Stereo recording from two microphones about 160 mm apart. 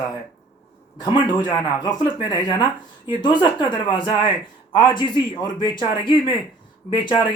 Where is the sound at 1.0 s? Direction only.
25° left (ahead or behind).